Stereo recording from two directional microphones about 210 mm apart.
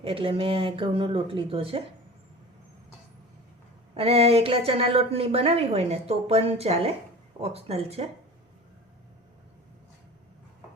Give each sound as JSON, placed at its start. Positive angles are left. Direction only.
{"t": 0.0, "sound": "a woman's voice", "side_deg": -25}
{"t": 3.9, "sound": "a woman's voice", "side_deg": -30}